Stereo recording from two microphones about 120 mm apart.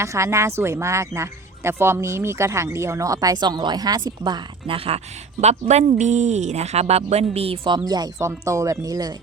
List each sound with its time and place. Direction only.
0.0 s speech: 25° right (ahead or behind); by 4.9 s 50° right (ahead or behind)
5.4 s speech: 65° right (ahead or behind); by 7.8 s 50° right (ahead or behind)
7.9 s speech: 35° right (ahead or behind)